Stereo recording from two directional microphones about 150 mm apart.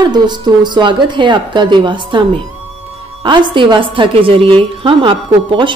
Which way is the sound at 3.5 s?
35° right (ahead or behind).